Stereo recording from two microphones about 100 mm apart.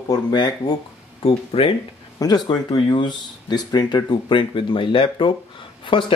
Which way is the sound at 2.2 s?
45° left (ahead or behind).